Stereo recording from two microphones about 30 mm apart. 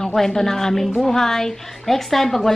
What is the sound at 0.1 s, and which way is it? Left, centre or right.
A woman's voice, centre.